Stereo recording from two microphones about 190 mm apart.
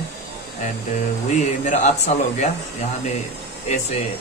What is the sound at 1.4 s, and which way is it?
A man's voice, 40° left (ahead or behind).